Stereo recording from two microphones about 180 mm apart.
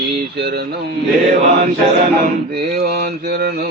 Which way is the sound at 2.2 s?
60° right (ahead or behind).